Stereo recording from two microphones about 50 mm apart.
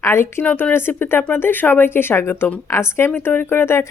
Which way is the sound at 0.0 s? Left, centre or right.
Left.